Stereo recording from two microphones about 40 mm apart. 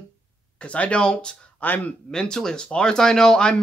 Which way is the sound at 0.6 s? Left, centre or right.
Left.